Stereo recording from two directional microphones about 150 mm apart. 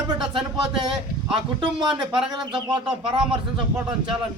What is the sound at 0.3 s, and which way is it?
Speech, 35° right (ahead or behind).